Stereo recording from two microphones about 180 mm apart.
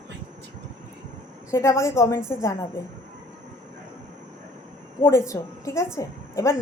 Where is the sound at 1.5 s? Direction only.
15° left (ahead or behind).